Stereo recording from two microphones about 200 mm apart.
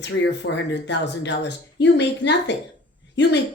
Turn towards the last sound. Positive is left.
turn(degrees=60)  # may be behind; listen again after turning